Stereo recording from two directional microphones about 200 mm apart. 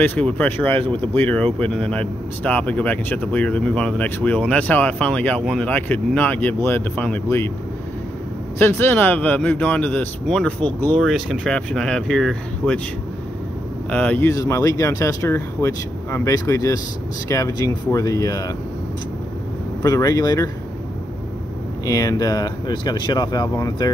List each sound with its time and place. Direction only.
0.0 s speech: 10° left (ahead or behind)
8.5 s speech: 10° left (ahead or behind)
13.8 s speech: 5° left (ahead or behind)
19.8 s speech: 15° left (ahead or behind)
21.8 s speech: 15° left (ahead or behind)